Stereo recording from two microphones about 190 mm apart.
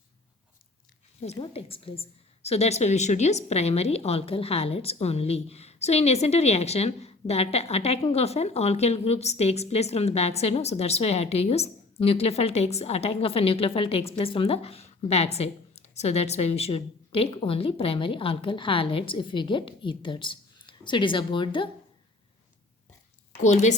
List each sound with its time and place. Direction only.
1.2 s a woman's voice: 30° left (ahead or behind)
23.4 s a woman's voice: 40° left (ahead or behind)